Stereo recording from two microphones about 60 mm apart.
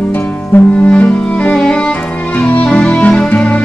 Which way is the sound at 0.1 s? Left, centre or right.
Left.